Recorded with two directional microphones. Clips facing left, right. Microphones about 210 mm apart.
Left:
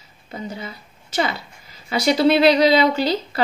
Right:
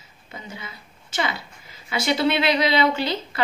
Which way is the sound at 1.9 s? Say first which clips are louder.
Left 5 dB; 35° left (ahead or behind).